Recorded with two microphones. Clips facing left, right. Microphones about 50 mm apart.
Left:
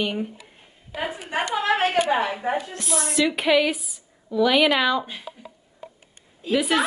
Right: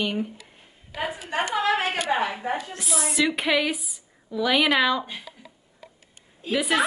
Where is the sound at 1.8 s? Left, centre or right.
Centre.